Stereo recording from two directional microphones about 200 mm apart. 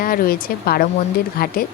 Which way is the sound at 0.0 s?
45° left (ahead or behind).